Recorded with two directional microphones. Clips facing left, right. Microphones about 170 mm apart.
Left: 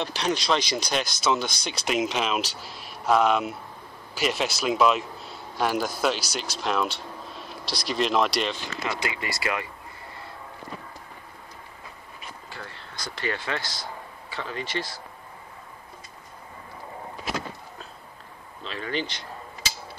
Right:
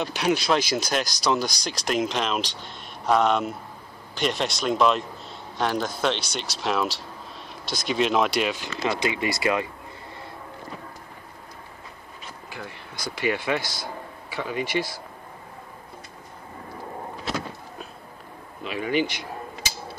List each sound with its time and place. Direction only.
0.0 s a man's voice: 5° right (ahead or behind)
8.8 s speech: 20° right (ahead or behind)
12.4 s speech: 15° right (ahead or behind)
18.6 s speech: 10° right (ahead or behind)